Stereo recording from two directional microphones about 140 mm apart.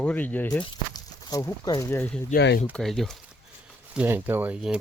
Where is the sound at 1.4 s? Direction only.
20° left (ahead or behind).